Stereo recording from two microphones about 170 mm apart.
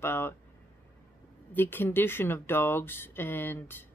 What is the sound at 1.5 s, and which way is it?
Speech, 10° left (ahead or behind).